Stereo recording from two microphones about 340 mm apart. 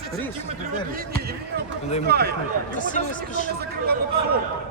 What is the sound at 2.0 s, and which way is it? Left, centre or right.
Speech, right.